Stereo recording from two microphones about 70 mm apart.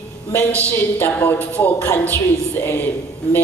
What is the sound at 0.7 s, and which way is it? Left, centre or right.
A woman's voice, left.